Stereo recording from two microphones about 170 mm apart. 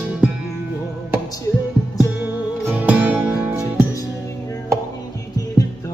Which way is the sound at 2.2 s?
10° right (ahead or behind).